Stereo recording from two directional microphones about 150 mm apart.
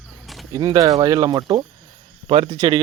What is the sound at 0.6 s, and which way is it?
Speech, 25° right (ahead or behind).